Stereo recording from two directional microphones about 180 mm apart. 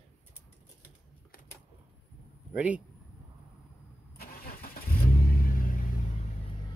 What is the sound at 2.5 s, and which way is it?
Speech, 5° right (ahead or behind).